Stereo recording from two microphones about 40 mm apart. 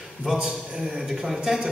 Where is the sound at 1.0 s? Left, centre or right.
Centre.